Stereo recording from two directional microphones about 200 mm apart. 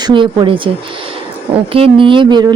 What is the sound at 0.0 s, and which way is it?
A woman's voice, 25° right (ahead or behind).